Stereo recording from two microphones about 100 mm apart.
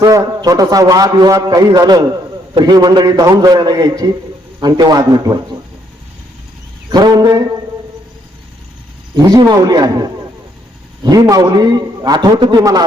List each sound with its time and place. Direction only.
0.0 s a man's voice: 40° right (ahead or behind)
6.9 s a man's voice: 45° right (ahead or behind)
9.1 s a man's voice: 40° right (ahead or behind)